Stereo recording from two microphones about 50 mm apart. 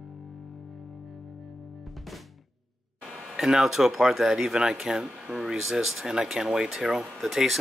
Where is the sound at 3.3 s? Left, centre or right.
Centre.